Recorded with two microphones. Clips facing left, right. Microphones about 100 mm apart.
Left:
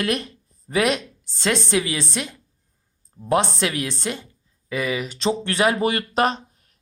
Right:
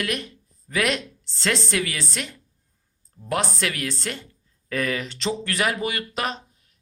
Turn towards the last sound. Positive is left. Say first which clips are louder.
# left 7 dB
turn(degrees=35)  # may be behind; listen again after turning